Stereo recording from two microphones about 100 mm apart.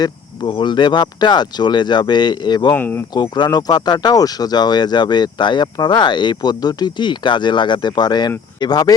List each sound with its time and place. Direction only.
0.0 s speech: 50° left (ahead or behind)
2.7 s speech: 20° left (ahead or behind)
3.2 s speech: 50° left (ahead or behind)